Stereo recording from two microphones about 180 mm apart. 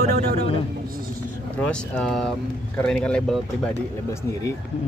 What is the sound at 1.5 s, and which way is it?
Speech, 5° left (ahead or behind).